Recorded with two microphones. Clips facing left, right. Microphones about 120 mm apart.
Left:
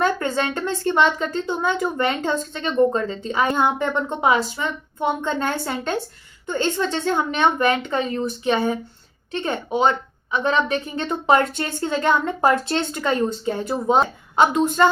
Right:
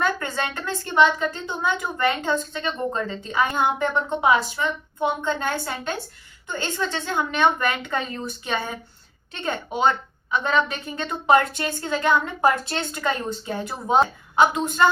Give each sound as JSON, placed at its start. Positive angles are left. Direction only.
{"t": 0.0, "sound": "a woman's voice", "side_deg": 30}